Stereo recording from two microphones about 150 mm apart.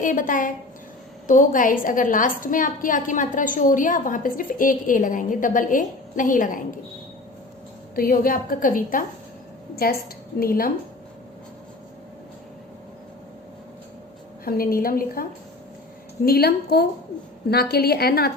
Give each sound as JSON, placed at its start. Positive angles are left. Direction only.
{"t": 0.0, "sound": "a woman's voice", "side_deg": 60}
{"t": 7.9, "sound": "a woman's voice", "side_deg": 75}
{"t": 9.7, "sound": "a woman's voice", "side_deg": 90}
{"t": 10.4, "sound": "a woman's voice", "side_deg": 80}
{"t": 14.4, "sound": "a woman's voice", "side_deg": 80}
{"t": 16.2, "sound": "a woman's voice", "side_deg": 90}